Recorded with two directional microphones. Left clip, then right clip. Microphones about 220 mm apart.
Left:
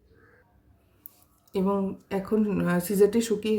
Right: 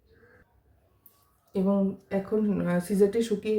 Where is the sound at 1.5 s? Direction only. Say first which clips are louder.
Even; 55° left (ahead or behind).